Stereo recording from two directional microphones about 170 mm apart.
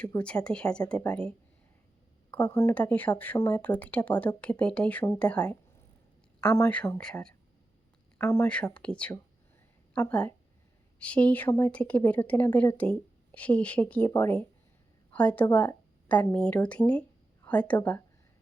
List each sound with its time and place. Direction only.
0.0 s speech: 10° left (ahead or behind)
2.3 s a woman's voice: 10° left (ahead or behind)
8.2 s a woman's voice: 15° left (ahead or behind)